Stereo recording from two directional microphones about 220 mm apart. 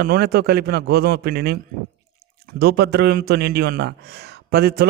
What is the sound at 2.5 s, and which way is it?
Speech, 45° right (ahead or behind).